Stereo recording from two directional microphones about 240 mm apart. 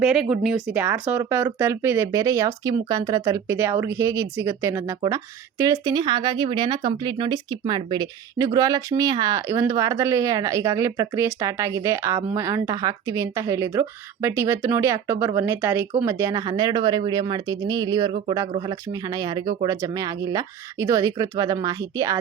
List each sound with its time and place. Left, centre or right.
0.0 s speech: centre